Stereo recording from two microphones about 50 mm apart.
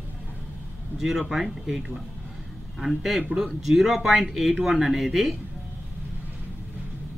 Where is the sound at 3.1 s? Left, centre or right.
Centre.